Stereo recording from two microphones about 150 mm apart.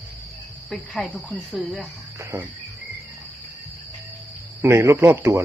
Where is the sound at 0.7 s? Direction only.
Centre (ahead or behind).